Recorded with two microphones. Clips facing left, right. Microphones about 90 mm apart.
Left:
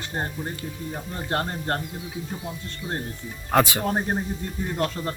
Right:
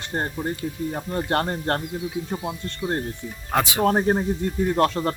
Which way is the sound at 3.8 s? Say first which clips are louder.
Right 6 dB; 70° right (ahead or behind).